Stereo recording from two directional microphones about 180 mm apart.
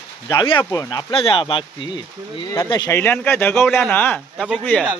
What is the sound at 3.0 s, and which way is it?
Speech, 10° left (ahead or behind).